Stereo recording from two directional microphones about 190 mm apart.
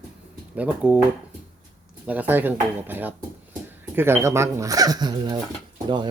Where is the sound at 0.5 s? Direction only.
5° right (ahead or behind).